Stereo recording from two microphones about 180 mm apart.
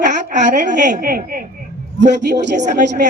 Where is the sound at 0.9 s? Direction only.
55° right (ahead or behind).